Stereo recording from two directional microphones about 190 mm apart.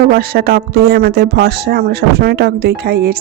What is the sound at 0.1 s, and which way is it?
Speech, 55° right (ahead or behind).